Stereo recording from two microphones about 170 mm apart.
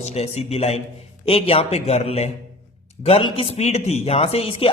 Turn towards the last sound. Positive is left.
turn(degrees=35)  # may be behind; listen again after turning